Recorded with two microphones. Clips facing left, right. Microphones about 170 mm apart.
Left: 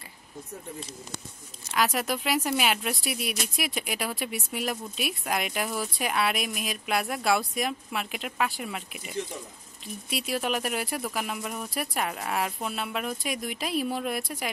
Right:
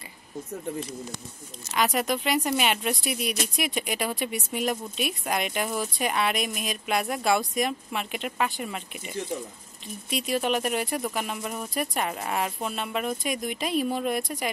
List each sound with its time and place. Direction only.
1.8 s speech: centre (ahead or behind)
10.0 s speech: centre (ahead or behind)